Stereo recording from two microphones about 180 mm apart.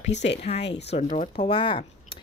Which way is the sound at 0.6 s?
70° left (ahead or behind).